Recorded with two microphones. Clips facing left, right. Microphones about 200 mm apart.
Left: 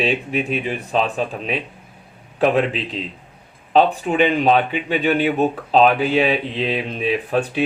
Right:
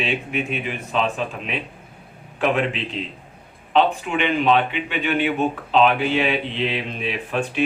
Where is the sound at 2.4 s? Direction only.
35° left (ahead or behind).